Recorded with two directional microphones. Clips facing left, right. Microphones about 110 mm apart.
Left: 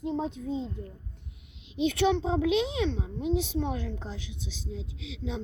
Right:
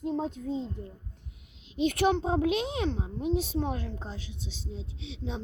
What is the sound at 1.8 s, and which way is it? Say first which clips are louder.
A woman's voice: even; 50° right (ahead or behind).